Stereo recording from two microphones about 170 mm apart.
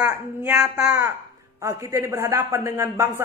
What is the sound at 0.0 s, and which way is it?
Speech, 10° right (ahead or behind).